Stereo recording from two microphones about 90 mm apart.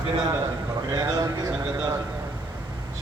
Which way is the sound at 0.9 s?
45° right (ahead or behind).